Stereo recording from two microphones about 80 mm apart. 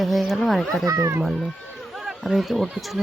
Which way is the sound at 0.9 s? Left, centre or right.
Right.